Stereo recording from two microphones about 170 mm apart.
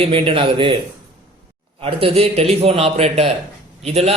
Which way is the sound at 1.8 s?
35° right (ahead or behind).